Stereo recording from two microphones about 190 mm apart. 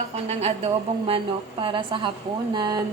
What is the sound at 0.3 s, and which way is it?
A woman's voice, 30° right (ahead or behind).